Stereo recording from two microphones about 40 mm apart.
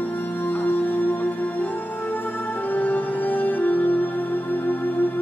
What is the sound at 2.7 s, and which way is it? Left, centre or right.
Music, left.